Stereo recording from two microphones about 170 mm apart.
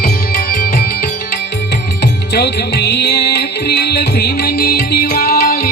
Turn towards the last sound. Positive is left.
turn(degrees=60)  # may be behind; listen again after turning